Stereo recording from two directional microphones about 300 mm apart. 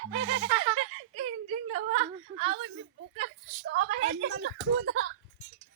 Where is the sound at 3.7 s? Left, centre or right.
Right.